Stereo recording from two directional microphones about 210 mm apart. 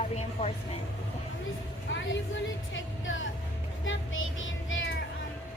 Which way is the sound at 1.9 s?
65° left (ahead or behind).